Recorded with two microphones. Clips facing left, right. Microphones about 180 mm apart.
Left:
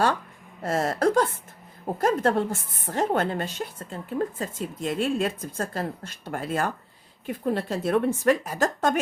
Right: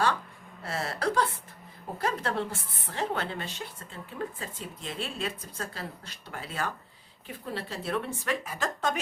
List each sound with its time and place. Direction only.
0.6 s a woman's voice: 45° left (ahead or behind)